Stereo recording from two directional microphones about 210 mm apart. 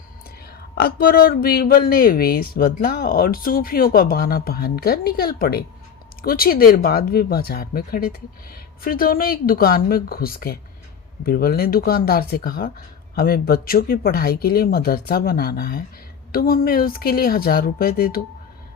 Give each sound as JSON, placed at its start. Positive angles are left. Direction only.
{"t": 0.8, "sound": "speech", "side_deg": 45}